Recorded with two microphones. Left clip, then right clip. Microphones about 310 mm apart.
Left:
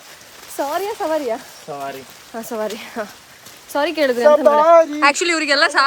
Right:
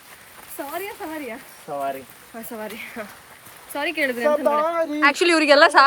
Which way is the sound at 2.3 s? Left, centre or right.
Centre.